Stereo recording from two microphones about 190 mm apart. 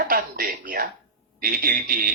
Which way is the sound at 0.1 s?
50° right (ahead or behind).